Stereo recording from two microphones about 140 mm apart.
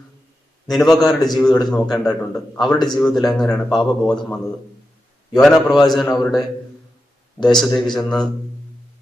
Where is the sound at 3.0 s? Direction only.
Centre (ahead or behind).